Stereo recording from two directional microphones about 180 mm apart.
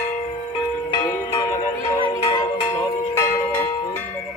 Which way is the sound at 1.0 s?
15° left (ahead or behind).